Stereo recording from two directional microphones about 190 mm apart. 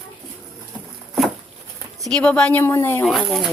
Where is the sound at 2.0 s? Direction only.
5° left (ahead or behind).